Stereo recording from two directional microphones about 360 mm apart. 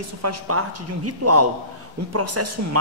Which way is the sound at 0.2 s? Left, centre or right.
Right.